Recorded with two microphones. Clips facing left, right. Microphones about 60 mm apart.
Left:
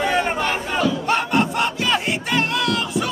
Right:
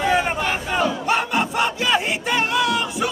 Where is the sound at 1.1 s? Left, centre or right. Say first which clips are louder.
Left 1 dB; centre.